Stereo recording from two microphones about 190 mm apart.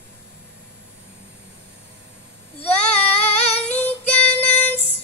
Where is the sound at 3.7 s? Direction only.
10° left (ahead or behind).